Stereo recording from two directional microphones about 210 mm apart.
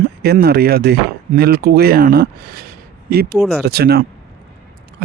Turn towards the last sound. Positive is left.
turn(degrees=-50)  # may be behind; listen again after turning